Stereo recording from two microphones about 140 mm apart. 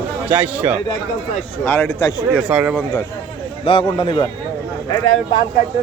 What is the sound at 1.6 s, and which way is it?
Speech, 10° left (ahead or behind).